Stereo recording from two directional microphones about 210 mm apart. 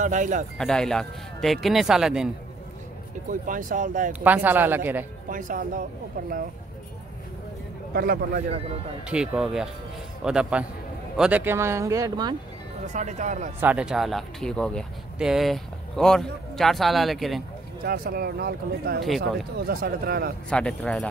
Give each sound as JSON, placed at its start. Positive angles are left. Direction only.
{"t": 0.0, "sound": "speech", "side_deg": -35}
{"t": 0.6, "sound": "speech", "side_deg": 0}
{"t": 3.3, "sound": "speech", "side_deg": -40}
{"t": 4.1, "sound": "speech", "side_deg": -10}
{"t": 5.3, "sound": "speech", "side_deg": -40}
{"t": 7.9, "sound": "speech", "side_deg": -45}
{"t": 9.1, "sound": "speech", "side_deg": -5}
{"t": 12.9, "sound": "speech", "side_deg": -35}
{"t": 13.6, "sound": "speech", "side_deg": -5}
{"t": 17.8, "sound": "speech", "side_deg": -45}
{"t": 20.4, "sound": "speech", "side_deg": 5}